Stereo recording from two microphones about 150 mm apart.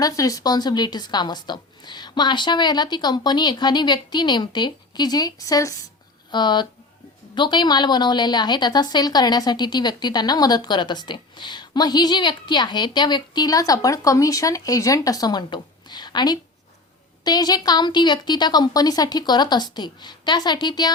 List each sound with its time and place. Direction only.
0.0 s a woman's voice: 20° left (ahead or behind)